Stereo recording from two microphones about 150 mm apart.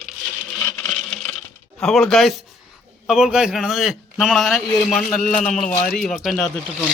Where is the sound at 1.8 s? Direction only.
Centre (ahead or behind).